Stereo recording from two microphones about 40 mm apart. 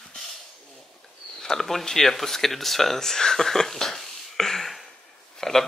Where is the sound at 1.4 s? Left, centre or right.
Centre.